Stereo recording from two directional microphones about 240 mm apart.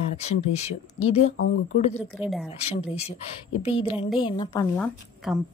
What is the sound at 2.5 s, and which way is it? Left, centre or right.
A woman's voice, left.